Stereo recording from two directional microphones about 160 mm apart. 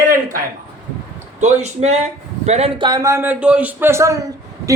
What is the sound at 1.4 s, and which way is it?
Speech, 45° right (ahead or behind).